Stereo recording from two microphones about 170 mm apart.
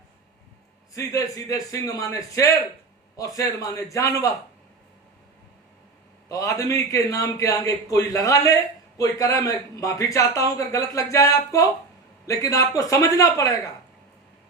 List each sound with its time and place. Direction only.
0.9 s a man's voice: 20° left (ahead or behind)
6.2 s a man's voice: 20° left (ahead or behind)